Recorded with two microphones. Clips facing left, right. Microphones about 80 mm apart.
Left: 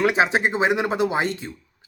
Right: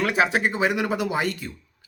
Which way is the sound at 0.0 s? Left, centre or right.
Left.